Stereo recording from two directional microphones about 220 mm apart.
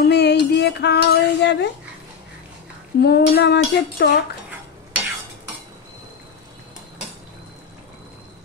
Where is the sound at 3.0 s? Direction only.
45° left (ahead or behind).